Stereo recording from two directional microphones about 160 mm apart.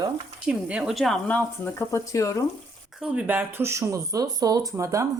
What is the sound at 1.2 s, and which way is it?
Speech, 10° left (ahead or behind).